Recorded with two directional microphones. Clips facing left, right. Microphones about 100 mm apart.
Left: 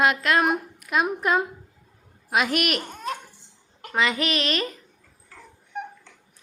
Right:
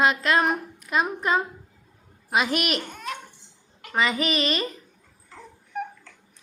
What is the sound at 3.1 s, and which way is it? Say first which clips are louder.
Cough: left 4 dB; 35° left (ahead or behind).